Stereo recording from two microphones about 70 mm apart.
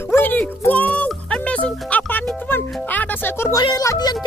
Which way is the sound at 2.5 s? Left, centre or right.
Left.